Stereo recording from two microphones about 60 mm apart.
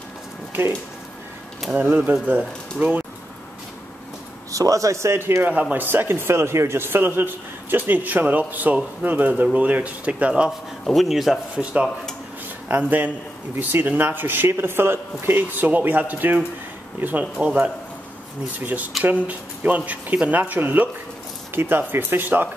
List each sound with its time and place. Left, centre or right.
1.8 s a man's voice: right
4.5 s speech: right
5.4 s speech: right
5.9 s a man's voice: right
11.0 s speech: centre
11.5 s speech: centre
12.6 s a man's voice: right
17.2 s speech: centre
19.2 s speech: right
21.5 s a man's voice: right